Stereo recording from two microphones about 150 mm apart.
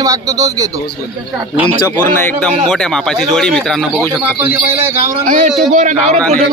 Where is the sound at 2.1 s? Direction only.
10° left (ahead or behind).